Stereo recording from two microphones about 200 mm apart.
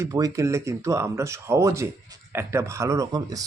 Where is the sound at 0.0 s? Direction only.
15° right (ahead or behind).